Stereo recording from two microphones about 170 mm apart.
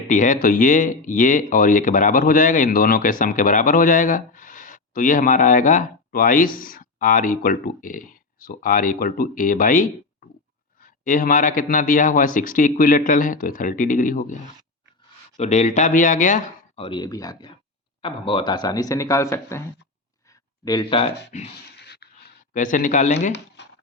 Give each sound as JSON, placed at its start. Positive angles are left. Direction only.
{"t": 0.1, "sound": "speech", "side_deg": 50}
{"t": 15.4, "sound": "speech", "side_deg": 40}
{"t": 20.7, "sound": "speech", "side_deg": 25}
{"t": 21.2, "sound": "speech", "side_deg": 40}
{"t": 21.5, "sound": "a sound", "side_deg": 70}
{"t": 22.5, "sound": "speech", "side_deg": 50}
{"t": 23.6, "sound": "music", "side_deg": 90}